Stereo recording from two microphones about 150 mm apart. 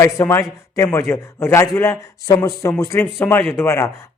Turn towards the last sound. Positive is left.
turn(degrees=20)  # may be behind; listen again after turning